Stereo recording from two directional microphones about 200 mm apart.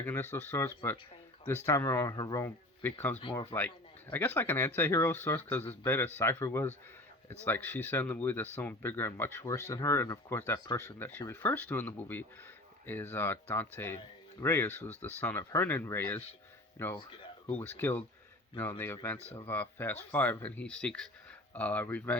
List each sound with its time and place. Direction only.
0.0 s speech: 10° left (ahead or behind)
3.2 s speech: 25° left (ahead or behind)
4.1 s a man's voice: 10° left (ahead or behind)
17.0 s a sound: 25° left (ahead or behind)
17.5 s speech: 10° left (ahead or behind)